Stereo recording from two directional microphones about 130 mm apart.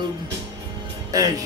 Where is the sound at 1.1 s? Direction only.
25° right (ahead or behind).